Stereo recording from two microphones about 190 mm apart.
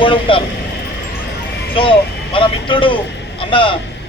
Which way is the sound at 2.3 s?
25° left (ahead or behind).